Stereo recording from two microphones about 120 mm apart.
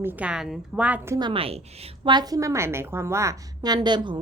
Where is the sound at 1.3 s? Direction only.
55° right (ahead or behind).